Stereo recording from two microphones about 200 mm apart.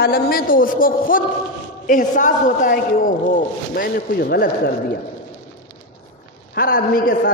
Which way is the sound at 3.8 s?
50° left (ahead or behind).